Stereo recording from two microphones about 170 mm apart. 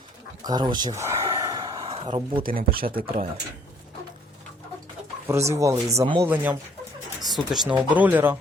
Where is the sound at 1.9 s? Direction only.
35° right (ahead or behind).